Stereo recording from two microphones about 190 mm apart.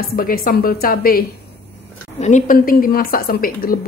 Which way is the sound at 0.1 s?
50° left (ahead or behind).